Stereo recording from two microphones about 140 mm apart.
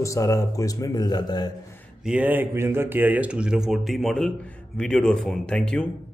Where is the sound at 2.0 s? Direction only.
10° right (ahead or behind); by 5.8 s 5° left (ahead or behind).